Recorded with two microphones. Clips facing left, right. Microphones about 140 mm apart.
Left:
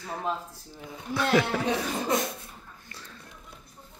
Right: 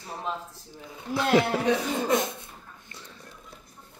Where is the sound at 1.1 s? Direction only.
20° right (ahead or behind).